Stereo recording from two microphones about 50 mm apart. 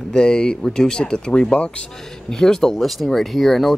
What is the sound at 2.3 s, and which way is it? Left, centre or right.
Speech, centre.